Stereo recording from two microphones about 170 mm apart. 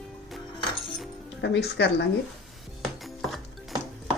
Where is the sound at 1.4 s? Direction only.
85° left.